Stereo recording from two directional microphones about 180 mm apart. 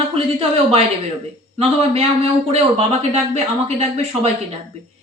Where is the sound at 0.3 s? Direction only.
35° right (ahead or behind).